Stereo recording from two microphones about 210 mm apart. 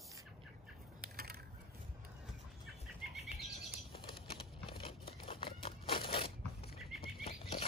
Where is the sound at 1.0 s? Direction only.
45° right (ahead or behind).